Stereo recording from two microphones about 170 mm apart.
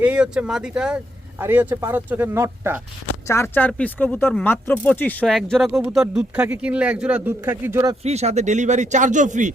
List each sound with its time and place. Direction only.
0.0 s speech: 5° right (ahead or behind)
3.2 s speech: 15° left (ahead or behind); by 7.9 s 15° right (ahead or behind)
8.0 s speech: 40° right (ahead or behind)